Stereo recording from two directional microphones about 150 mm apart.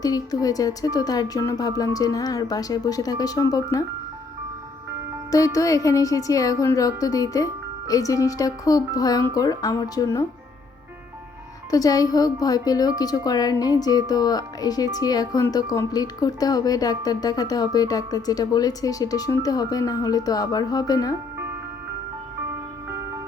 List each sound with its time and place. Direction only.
0.0 s speech: 25° left (ahead or behind)
5.3 s speech: 20° left (ahead or behind)
11.7 s speech: 25° left (ahead or behind)